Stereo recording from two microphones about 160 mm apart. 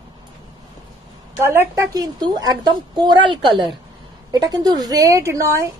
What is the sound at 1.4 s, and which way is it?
A woman's voice, 15° right (ahead or behind).